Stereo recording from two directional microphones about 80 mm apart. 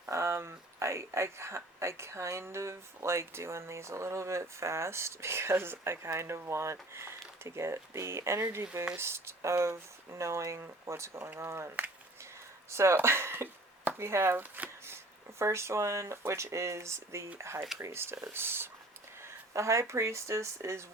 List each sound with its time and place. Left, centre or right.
0.0 s speech: right
12.7 s speech: right
19.2 s a sound: right
19.8 s speech: right